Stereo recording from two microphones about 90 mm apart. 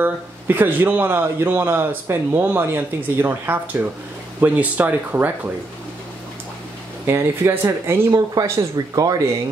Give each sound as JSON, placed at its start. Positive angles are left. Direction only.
{"t": 0.0, "sound": "a man's voice", "side_deg": -20}
{"t": 7.1, "sound": "a man's voice", "side_deg": -30}
{"t": 8.1, "sound": "speech", "side_deg": -45}